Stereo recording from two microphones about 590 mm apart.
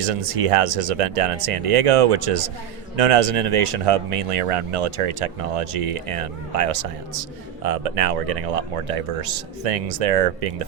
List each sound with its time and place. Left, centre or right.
0.0 s speech: right